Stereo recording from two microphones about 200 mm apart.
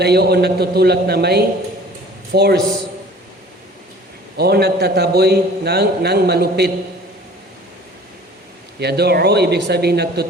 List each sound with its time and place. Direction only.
0.0 s a man's voice: 55° right (ahead or behind)
4.4 s a man's voice: 55° right (ahead or behind)
8.8 s speech: 55° right (ahead or behind)